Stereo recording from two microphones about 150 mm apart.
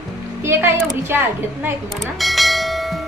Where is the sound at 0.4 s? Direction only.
15° right (ahead or behind).